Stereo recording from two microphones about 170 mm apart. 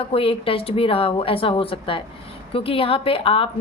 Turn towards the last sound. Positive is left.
turn(degrees=30)  # may be behind; listen again after turning